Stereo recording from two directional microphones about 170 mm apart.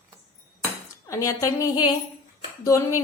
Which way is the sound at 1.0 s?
20° left (ahead or behind).